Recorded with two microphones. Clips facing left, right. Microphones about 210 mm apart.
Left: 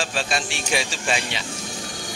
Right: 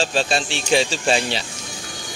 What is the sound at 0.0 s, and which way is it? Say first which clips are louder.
Speech: right 5 dB; 30° right (ahead or behind).